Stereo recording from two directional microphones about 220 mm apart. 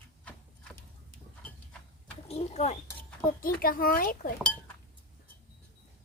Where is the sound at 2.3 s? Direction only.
30° left (ahead or behind).